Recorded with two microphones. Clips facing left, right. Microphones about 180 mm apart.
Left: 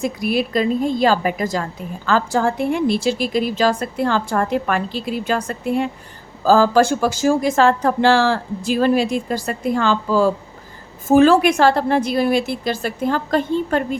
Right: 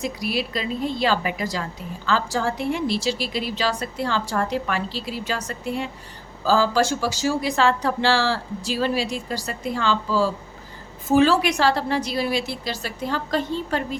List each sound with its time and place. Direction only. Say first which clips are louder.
0.0 s speech: left 6 dB; 50° left (ahead or behind)